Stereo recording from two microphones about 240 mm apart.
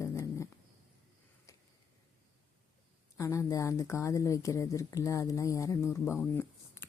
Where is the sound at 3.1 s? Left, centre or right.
Centre.